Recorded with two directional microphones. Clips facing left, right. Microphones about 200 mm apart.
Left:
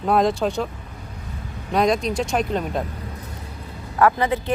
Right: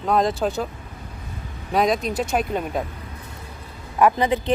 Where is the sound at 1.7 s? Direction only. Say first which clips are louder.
Left 1 dB; centre (ahead or behind).